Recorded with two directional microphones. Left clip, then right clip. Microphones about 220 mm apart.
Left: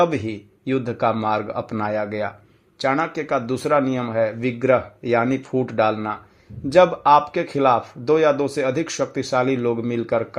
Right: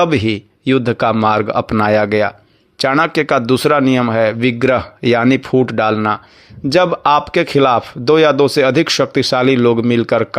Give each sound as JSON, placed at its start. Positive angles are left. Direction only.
{"t": 0.0, "sound": "speech", "side_deg": -35}